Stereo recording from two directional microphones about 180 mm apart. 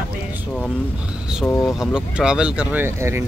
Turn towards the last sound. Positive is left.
turn(degrees=-15)  # may be behind; listen again after turning